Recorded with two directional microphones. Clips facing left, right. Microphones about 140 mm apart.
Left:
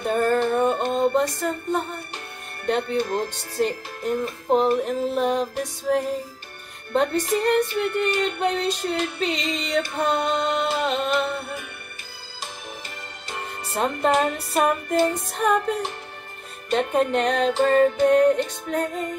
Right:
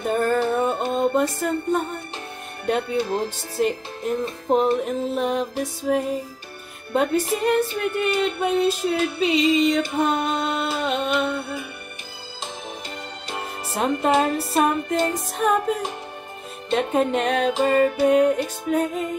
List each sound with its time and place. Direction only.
0.0 s music: centre (ahead or behind)
13.4 s music: 5° right (ahead or behind)
14.1 s music: 30° right (ahead or behind)
15.1 s music: centre (ahead or behind)